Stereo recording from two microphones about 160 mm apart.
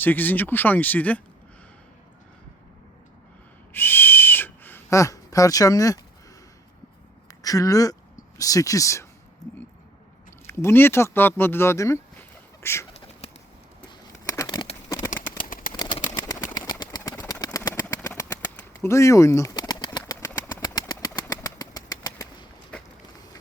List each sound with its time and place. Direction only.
0.0 s speech: 10° left (ahead or behind)
3.7 s owl: 15° left (ahead or behind)
7.3 s speech: 20° left (ahead or behind)
10.4 s speech: 15° left (ahead or behind)
13.2 s bird: 40° left (ahead or behind)
14.3 s a sound: 20° left (ahead or behind)
15.4 s a sound: 60° left (ahead or behind)
16.2 s a sound: 25° left (ahead or behind)
18.5 s bird: 15° left (ahead or behind)
21.2 s bird flight: 20° left (ahead or behind)